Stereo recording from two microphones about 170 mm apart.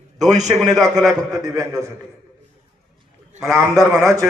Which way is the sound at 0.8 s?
20° right (ahead or behind).